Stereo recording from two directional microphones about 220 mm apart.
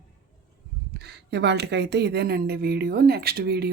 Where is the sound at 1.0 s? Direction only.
50° right (ahead or behind).